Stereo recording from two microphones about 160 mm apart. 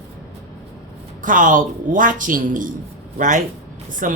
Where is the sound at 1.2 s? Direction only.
55° right (ahead or behind).